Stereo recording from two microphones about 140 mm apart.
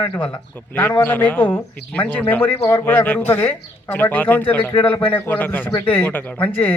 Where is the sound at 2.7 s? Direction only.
15° left (ahead or behind).